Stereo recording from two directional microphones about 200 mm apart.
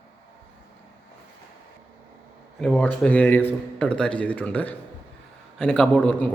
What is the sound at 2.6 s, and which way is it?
A man's voice, 5° left (ahead or behind).